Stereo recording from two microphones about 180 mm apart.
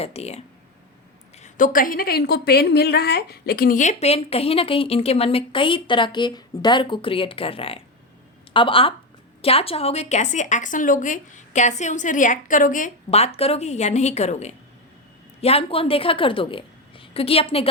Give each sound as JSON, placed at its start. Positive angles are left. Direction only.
{"t": 0.0, "sound": "a woman's voice", "side_deg": 35}
{"t": 1.4, "sound": "a woman's voice", "side_deg": 50}